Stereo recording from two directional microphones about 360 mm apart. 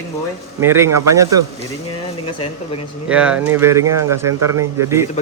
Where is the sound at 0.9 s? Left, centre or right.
Right.